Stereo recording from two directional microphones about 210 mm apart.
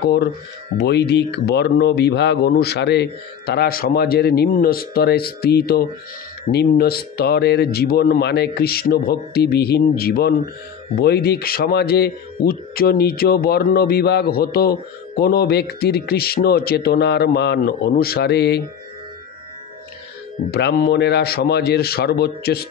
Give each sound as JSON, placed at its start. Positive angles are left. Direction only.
{"t": 0.7, "sound": "speech", "side_deg": 50}
{"t": 20.5, "sound": "speech", "side_deg": 50}